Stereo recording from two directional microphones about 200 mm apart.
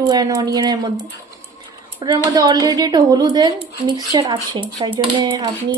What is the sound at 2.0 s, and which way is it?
Speech, 20° right (ahead or behind).